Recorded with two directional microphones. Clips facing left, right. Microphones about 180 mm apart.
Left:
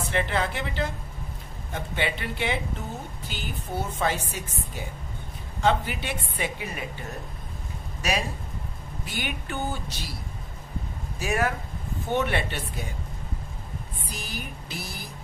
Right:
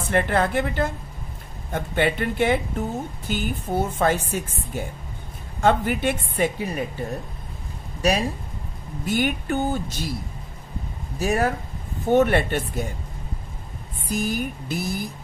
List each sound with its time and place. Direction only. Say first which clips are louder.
0.1 s a woman's voice: right 7 dB; 55° right (ahead or behind); by 7.1 s 35° right (ahead or behind)
9.0 s a woman's voice: right 11 dB; 45° right (ahead or behind)
11.1 s a woman's voice: right 4 dB; 40° right (ahead or behind)
14.0 s a woman's voice: right 14 dB; 50° right (ahead or behind)